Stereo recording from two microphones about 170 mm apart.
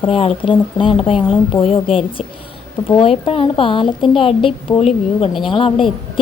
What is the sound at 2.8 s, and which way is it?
A woman's voice, 30° left (ahead or behind).